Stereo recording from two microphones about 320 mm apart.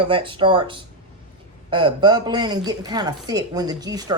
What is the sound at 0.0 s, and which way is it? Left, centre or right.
A woman's voice, centre.